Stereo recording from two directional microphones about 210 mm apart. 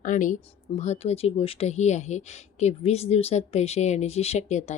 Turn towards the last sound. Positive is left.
turn(degrees=35)  # may be behind; listen again after turning